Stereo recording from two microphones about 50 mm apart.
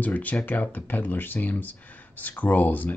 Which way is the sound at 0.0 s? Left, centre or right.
Left.